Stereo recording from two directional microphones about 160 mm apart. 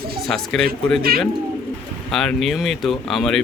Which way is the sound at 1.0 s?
70° right (ahead or behind).